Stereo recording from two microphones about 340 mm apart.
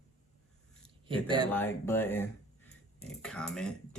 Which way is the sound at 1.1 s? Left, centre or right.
Centre.